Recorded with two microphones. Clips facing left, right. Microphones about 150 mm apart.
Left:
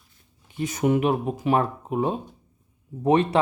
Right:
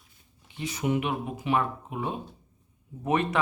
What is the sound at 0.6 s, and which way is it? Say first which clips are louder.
Speech: left 6 dB; 45° left (ahead or behind).